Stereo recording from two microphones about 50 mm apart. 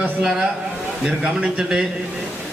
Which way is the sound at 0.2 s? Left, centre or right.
Centre.